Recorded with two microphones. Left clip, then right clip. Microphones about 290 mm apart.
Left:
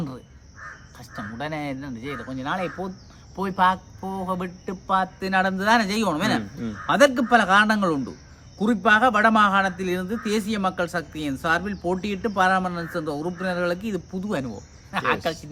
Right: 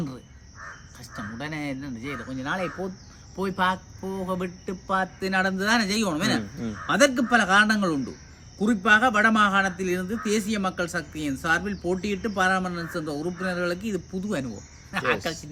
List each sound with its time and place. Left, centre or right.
0.9 s a man's voice: centre